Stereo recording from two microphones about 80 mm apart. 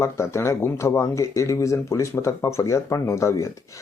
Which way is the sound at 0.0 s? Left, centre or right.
Left.